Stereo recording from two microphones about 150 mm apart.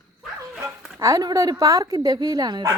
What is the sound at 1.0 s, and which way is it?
Speech, 25° right (ahead or behind).